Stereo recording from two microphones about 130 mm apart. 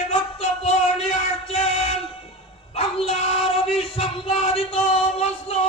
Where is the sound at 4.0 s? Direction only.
50° left (ahead or behind).